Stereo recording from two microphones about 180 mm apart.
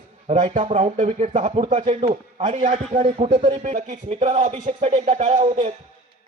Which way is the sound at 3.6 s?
45° right (ahead or behind).